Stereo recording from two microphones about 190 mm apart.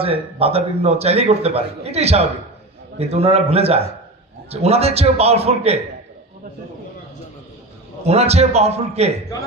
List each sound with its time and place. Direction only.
0.0 s a man's voice: 30° right (ahead or behind)
8.0 s a man's voice: 35° right (ahead or behind)